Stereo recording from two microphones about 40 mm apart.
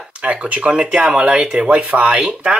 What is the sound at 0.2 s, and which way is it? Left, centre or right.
Speech, right.